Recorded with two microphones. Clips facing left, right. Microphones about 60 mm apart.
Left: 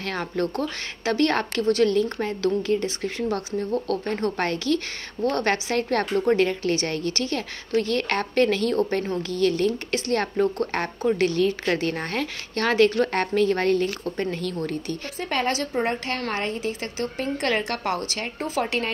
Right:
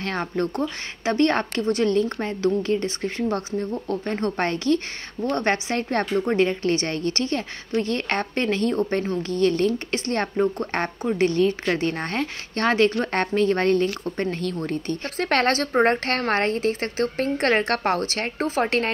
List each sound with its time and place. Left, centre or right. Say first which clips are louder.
0.0 s a woman's voice: right 1 dB; right
3.7 s speech: left 2 dB; centre
4.0 s a woman's voice: right 1 dB; right
11.6 s a woman's voice: right 1 dB; right
15.1 s a woman's voice: right 4 dB; right